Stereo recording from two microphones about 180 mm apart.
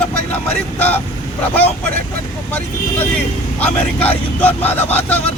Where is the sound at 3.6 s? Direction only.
10° left (ahead or behind).